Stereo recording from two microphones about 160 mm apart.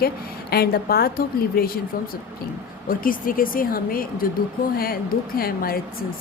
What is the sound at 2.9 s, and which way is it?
A woman's voice, 60° left (ahead or behind).